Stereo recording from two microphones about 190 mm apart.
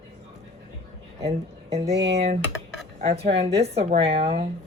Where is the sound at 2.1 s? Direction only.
35° right (ahead or behind).